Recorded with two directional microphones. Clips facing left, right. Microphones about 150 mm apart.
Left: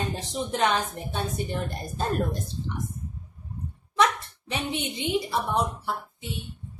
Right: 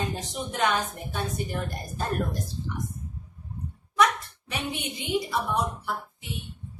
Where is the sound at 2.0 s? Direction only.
25° left (ahead or behind).